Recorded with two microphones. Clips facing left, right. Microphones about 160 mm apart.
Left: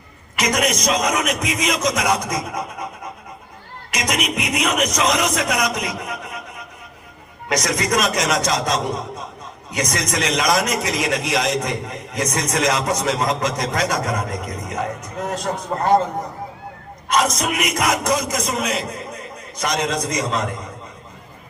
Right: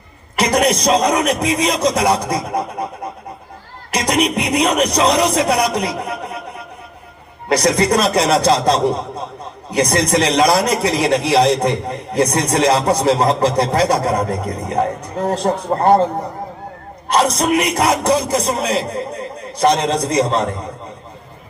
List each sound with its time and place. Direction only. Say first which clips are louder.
0.3 s a man's voice: right 5 dB; 30° right (ahead or behind)
7.4 s a man's voice: right 7 dB; 35° right (ahead or behind)
17.1 s a man's voice: right 5 dB; 30° right (ahead or behind)